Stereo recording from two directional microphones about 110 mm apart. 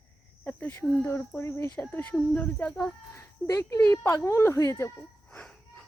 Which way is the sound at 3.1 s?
30° left (ahead or behind).